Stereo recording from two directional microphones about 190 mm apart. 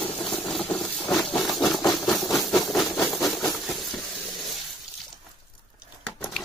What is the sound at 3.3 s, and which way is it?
Steam, centre (ahead or behind).